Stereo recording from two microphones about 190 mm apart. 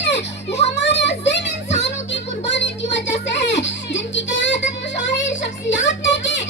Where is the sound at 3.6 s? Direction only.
70° left (ahead or behind).